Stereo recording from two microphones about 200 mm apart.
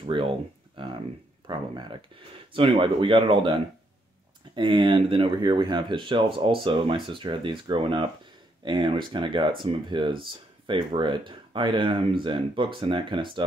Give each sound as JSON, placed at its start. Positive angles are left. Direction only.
{"t": 0.0, "sound": "speech", "side_deg": -25}